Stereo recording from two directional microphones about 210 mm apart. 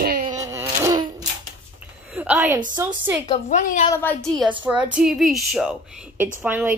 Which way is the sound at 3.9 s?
10° left (ahead or behind).